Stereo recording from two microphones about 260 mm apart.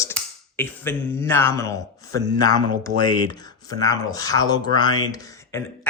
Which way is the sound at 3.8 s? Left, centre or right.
Centre.